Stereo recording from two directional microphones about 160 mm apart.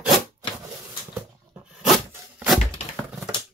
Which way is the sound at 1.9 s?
Centre (ahead or behind).